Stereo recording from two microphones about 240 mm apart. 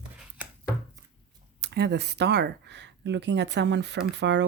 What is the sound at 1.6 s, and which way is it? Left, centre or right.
Speech, right.